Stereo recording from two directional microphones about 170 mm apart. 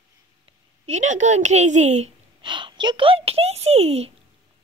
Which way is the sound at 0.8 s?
45° right (ahead or behind).